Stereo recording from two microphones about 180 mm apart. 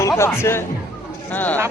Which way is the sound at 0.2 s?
15° left (ahead or behind).